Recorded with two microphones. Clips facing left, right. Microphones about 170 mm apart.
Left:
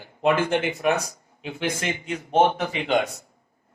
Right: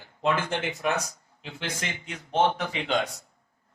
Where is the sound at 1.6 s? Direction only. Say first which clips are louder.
Left 7 dB; 55° left (ahead or behind).